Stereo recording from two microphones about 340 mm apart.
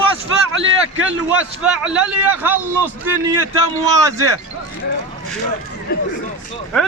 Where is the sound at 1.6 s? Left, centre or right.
Centre.